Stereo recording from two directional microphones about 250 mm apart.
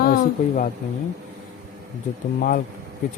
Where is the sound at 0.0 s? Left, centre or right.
Left.